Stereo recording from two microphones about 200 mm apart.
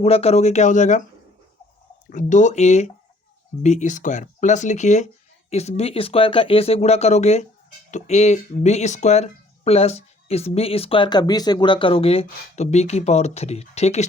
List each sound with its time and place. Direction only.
0.0 s speech: 30° left (ahead or behind)
2.0 s speech: 40° left (ahead or behind)